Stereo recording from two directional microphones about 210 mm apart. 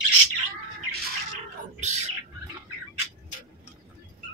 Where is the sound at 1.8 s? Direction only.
35° right (ahead or behind).